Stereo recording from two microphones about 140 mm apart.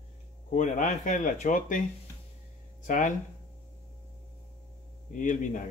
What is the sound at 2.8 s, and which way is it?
Speech, 65° left (ahead or behind).